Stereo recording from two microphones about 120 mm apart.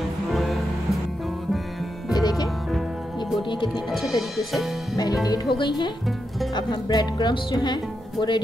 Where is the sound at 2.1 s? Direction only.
30° left (ahead or behind).